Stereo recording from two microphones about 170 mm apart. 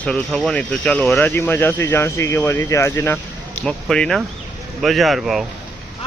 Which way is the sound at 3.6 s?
5° left (ahead or behind).